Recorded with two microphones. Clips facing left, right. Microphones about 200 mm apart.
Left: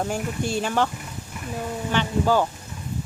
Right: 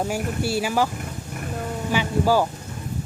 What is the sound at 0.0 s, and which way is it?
Speech, 5° right (ahead or behind).